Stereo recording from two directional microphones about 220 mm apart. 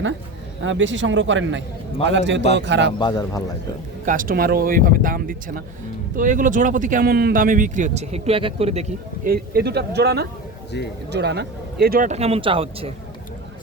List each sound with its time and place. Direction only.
0.6 s a man's voice: 60° right (ahead or behind)
3.0 s a man's voice: 20° left (ahead or behind)
4.0 s speech: 40° right (ahead or behind)
9.3 s a man's voice: 45° right (ahead or behind)
10.7 s speech: 50° left (ahead or behind)
11.1 s speech: 50° right (ahead or behind); by 12.9 s 25° right (ahead or behind)